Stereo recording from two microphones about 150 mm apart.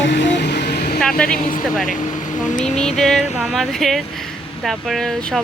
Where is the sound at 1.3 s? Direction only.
65° left (ahead or behind).